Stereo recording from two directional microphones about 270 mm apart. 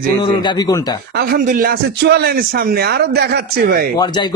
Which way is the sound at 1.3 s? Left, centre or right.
Right.